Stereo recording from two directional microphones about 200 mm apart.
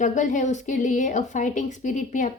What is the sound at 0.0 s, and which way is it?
Speech, 40° left (ahead or behind).